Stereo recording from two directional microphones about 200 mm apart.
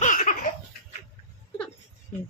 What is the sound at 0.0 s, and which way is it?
Laughter, 40° left (ahead or behind).